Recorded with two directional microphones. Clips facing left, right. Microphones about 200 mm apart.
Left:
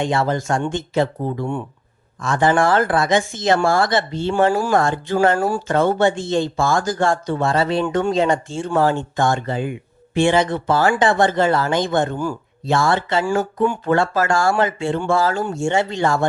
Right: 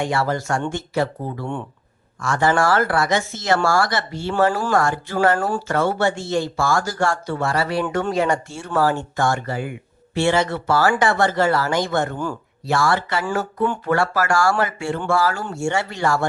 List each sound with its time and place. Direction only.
0.0 s speech: 20° left (ahead or behind)
5.5 s speech: 10° left (ahead or behind)